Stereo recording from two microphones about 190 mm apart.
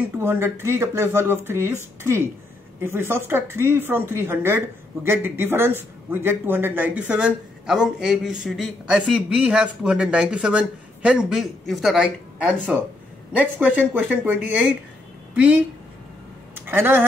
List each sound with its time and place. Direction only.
0.2 s speech: 10° right (ahead or behind)